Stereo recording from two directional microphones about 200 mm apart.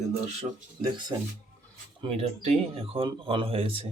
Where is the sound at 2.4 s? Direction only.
30° right (ahead or behind).